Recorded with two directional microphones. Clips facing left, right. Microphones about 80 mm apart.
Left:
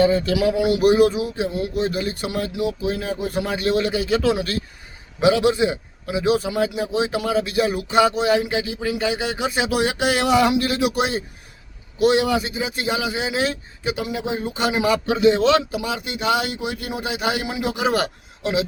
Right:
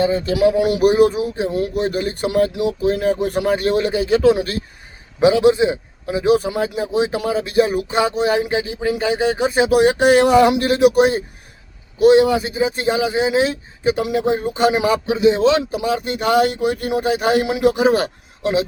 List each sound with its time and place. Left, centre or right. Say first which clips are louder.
0.0 s a man's voice: even; right
0.3 s speech: right 4 dB; right
3.4 s a man's voice: right 3 dB; right
13.8 s speech: right 7 dB; right
15.0 s a man's voice: right 1 dB; centre
15.7 s speech: right 6 dB; right
17.5 s speech: right 9 dB; right
17.7 s speech: right 5 dB; right